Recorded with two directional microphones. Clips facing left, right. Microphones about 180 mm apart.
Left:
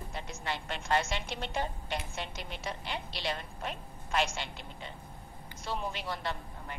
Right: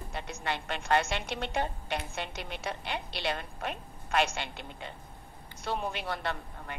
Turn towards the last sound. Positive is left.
turn(degrees=-60)  # may be behind; listen again after turning